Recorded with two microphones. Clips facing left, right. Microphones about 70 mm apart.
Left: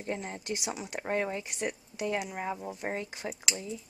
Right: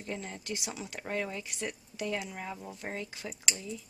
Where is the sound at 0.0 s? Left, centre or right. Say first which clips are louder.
Left 3 dB; left.